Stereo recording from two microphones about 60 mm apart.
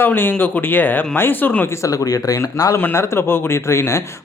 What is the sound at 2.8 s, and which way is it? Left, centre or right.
Speech, left.